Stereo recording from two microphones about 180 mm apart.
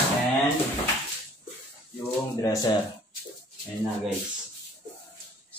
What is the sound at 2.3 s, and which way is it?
Speech, 20° left (ahead or behind).